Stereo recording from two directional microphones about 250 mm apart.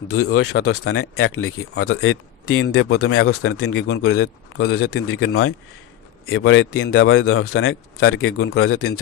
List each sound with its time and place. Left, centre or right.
0.1 s speech: left
3.6 s a man's voice: left
5.2 s a man's voice: left